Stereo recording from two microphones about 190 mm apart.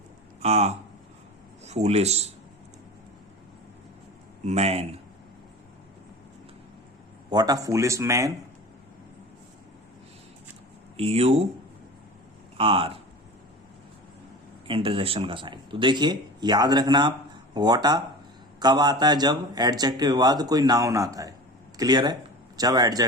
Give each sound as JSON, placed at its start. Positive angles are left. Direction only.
{"t": 0.4, "sound": "speech", "side_deg": -35}
{"t": 4.4, "sound": "speech", "side_deg": -35}
{"t": 7.3, "sound": "a man's voice", "side_deg": -20}
{"t": 10.9, "sound": "speech", "side_deg": -35}
{"t": 12.5, "sound": "speech", "side_deg": -30}
{"t": 14.7, "sound": "speech", "side_deg": -30}